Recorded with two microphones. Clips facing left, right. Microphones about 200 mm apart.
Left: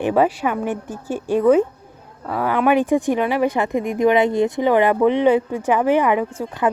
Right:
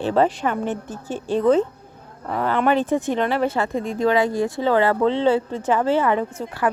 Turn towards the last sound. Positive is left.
turn(degrees=10)  # may be behind; listen again after turning